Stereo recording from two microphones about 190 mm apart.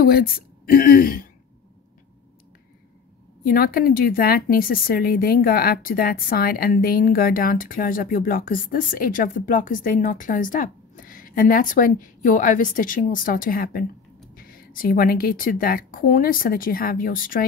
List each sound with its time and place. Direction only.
0.0 s a woman's voice: 50° left (ahead or behind)
3.4 s a woman's voice: 50° left (ahead or behind)